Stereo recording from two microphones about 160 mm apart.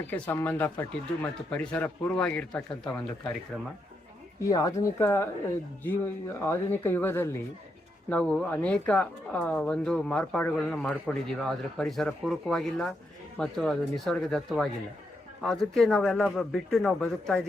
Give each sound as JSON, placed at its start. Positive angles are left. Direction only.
{"t": 0.1, "sound": "speech", "side_deg": 10}
{"t": 4.4, "sound": "speech", "side_deg": 20}